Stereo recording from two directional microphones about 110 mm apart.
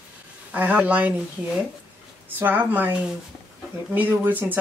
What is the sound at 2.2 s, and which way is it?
Speech, 15° right (ahead or behind).